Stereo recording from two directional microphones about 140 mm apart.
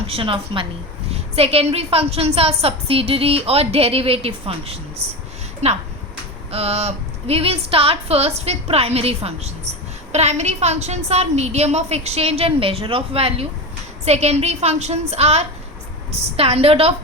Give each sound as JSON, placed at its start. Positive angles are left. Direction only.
{"t": 0.1, "sound": "a woman's voice", "side_deg": -40}